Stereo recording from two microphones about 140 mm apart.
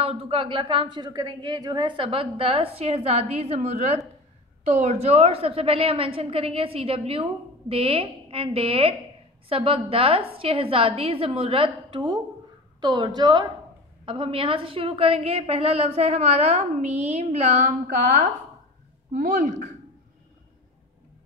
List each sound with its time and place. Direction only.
0.0 s a woman's voice: 45° right (ahead or behind); by 19.7 s 60° right (ahead or behind)